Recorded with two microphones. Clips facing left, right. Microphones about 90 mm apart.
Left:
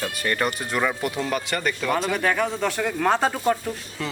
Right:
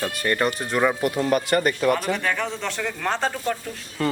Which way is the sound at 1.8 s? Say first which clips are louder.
Right 3 dB; 5° right (ahead or behind).